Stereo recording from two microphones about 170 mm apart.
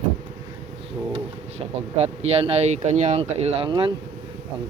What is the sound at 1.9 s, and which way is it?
Speech, 40° right (ahead or behind).